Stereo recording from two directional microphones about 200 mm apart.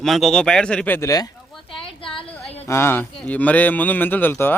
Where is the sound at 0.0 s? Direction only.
Centre (ahead or behind); by 1.3 s 15° left (ahead or behind).